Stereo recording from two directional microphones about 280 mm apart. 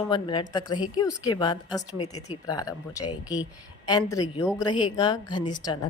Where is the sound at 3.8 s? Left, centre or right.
Centre.